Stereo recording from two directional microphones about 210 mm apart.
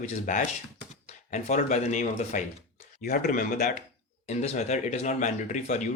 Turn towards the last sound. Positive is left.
turn(degrees=35)  # may be behind; listen again after turning